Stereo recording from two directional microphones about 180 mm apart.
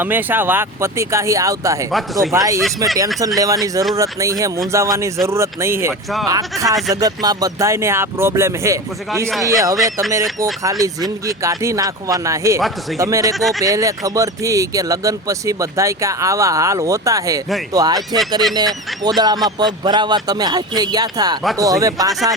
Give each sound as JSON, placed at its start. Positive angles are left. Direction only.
{"t": 0.0, "sound": "speech", "side_deg": -10}